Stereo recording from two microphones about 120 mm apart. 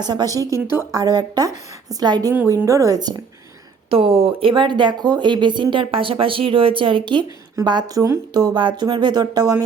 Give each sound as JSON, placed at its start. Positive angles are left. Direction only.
{"t": 0.0, "sound": "a woman's voice", "side_deg": -35}
{"t": 3.8, "sound": "speech", "side_deg": -50}